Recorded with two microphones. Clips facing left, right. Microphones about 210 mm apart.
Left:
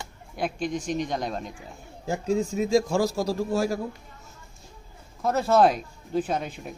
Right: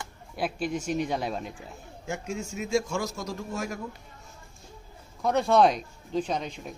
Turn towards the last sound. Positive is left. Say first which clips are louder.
# left 2 dB
turn(degrees=5)  # may be behind; listen again after turning